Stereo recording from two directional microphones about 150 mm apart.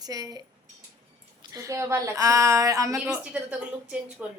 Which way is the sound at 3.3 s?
10° right (ahead or behind).